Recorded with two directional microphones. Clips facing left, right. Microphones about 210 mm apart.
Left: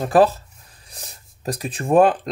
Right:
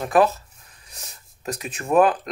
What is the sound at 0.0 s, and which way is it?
Speech, 30° left (ahead or behind).